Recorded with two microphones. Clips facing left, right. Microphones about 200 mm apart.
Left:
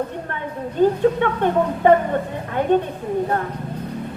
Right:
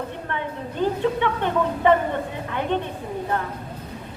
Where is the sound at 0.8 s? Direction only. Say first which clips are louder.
Left 6 dB; 45° left (ahead or behind).